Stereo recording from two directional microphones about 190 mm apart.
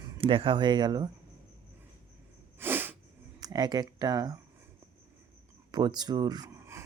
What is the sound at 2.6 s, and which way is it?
Sneeze, 10° right (ahead or behind).